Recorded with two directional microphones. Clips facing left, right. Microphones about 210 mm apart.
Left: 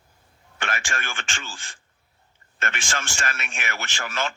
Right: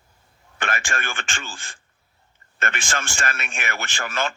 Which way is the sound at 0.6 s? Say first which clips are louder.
Right 3 dB; 55° right (ahead or behind).